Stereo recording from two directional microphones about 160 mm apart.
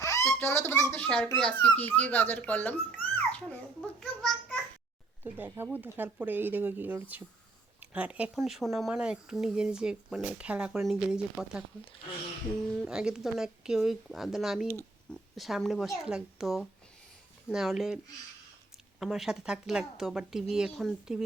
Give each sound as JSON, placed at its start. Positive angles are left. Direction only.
{"t": 0.0, "sound": "speech", "side_deg": 20}
{"t": 2.9, "sound": "babbling", "side_deg": 10}
{"t": 3.8, "sound": "a sound", "side_deg": 5}
{"t": 5.2, "sound": "speech", "side_deg": -10}
{"t": 12.7, "sound": "speech", "side_deg": -5}